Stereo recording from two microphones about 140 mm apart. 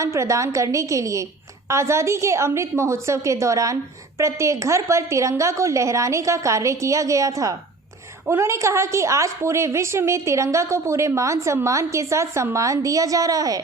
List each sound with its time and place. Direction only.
0.0 s a woman's voice: 20° right (ahead or behind)